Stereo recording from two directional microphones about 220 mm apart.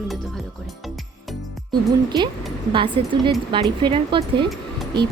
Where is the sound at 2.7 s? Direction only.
20° right (ahead or behind).